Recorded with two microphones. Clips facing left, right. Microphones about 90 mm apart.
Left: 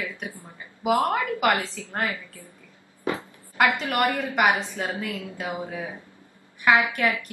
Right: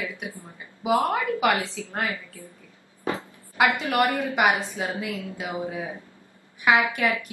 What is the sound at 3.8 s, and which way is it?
A woman's voice, 20° right (ahead or behind).